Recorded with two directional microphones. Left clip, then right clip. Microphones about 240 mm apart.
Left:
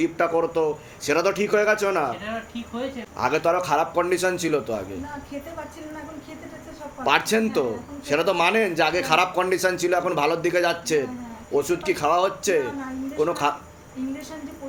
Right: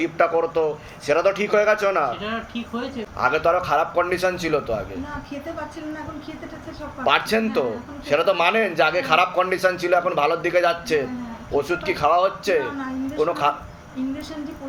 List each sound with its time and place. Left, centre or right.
0.0 s a man's voice: left
3.2 s a man's voice: left
7.0 s a man's voice: left